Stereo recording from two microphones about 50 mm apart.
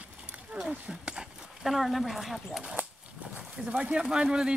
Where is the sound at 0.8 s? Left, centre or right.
Centre.